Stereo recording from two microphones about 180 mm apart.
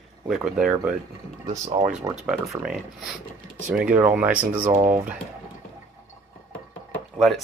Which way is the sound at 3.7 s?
10° right (ahead or behind).